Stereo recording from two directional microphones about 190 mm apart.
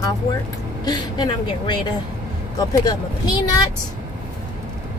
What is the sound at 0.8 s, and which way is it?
A woman's voice, 20° left (ahead or behind).